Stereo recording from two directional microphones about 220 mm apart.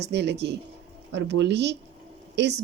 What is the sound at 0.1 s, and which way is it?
Speech, 50° right (ahead or behind).